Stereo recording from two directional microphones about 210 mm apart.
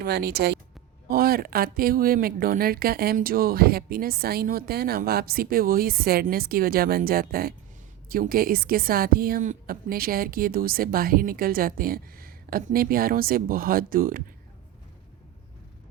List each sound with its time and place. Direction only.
0.0 s speech: 50° right (ahead or behind)